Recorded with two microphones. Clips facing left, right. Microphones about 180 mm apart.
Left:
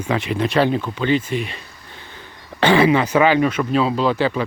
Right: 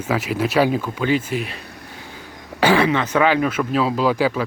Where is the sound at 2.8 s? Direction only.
10° left (ahead or behind); by 4.4 s 5° right (ahead or behind).